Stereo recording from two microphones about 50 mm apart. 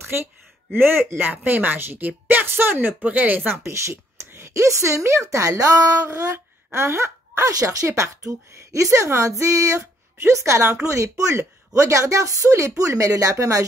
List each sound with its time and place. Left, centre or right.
0.0 s a woman's voice: right
3.0 s a woman's voice: right
3.5 s a woman's voice: right
6.7 s speech: right